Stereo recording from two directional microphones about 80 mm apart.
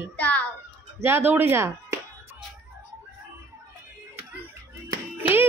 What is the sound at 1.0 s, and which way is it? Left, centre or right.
Speech, right.